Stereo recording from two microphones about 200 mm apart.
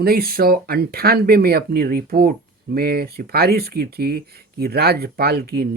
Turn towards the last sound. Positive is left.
turn(degrees=-50)  # may be behind; listen again after turning